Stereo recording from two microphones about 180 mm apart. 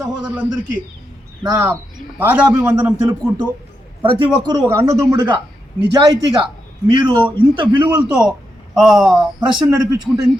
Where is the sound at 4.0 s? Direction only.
30° right (ahead or behind).